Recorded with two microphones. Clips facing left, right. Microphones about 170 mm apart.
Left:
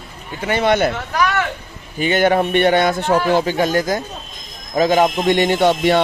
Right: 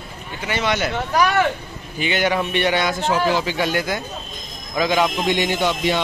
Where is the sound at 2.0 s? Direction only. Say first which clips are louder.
Left 5 dB; 50° left (ahead or behind).